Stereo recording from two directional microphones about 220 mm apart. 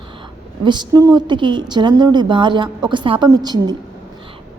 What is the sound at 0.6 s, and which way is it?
A woman's voice, 20° right (ahead or behind).